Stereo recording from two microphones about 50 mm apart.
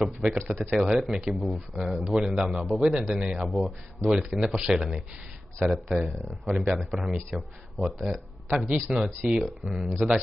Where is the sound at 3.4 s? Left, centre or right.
Centre.